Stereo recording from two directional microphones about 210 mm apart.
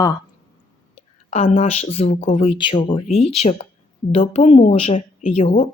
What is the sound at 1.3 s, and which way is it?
Speech, 35° left (ahead or behind).